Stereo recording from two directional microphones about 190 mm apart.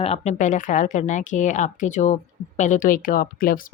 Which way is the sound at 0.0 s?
35° left (ahead or behind).